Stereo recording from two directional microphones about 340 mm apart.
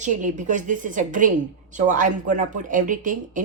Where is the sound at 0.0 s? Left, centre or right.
Right.